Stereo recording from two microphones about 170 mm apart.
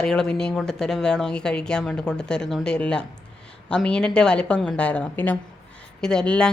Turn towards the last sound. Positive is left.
turn(degrees=5)  # may be behind; listen again after turning